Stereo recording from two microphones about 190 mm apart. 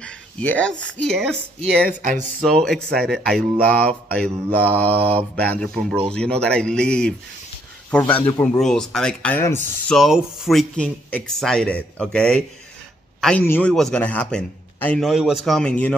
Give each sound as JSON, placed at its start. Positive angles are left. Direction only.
{"t": 0.0, "sound": "a sound", "side_deg": 5}
{"t": 0.8, "sound": "mantra", "side_deg": 5}
{"t": 1.6, "sound": "speech", "side_deg": -40}
{"t": 2.4, "sound": "mantra", "side_deg": 0}
{"t": 9.8, "sound": "mantra", "side_deg": 0}